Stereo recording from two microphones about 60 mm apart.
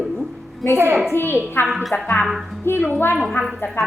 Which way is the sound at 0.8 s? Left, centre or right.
Right.